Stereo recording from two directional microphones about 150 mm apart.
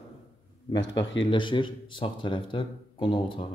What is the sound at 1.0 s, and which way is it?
Speech, 30° left (ahead or behind).